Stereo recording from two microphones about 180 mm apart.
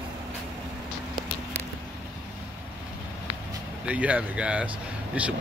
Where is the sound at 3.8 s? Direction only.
10° right (ahead or behind).